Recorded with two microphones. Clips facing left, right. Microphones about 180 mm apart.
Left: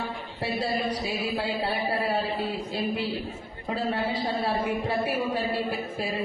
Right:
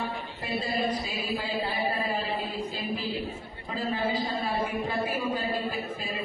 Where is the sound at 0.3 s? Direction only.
75° left (ahead or behind).